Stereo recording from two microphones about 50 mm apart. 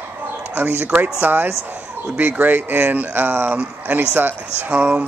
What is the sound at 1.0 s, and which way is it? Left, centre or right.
Speech, right.